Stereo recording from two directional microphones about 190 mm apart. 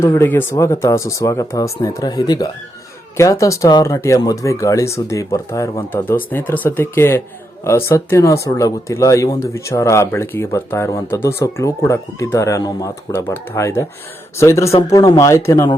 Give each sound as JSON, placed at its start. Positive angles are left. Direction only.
{"t": 0.0, "sound": "speech", "side_deg": 10}